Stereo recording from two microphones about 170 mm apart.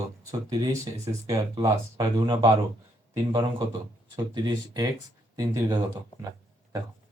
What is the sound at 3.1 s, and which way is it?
Speech, 25° right (ahead or behind).